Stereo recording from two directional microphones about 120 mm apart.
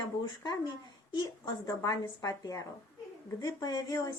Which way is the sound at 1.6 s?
30° left (ahead or behind).